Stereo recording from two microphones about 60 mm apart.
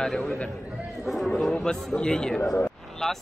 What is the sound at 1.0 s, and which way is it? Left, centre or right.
Speech, centre.